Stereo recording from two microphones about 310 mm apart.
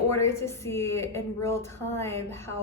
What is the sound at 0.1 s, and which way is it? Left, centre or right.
A woman's voice, centre.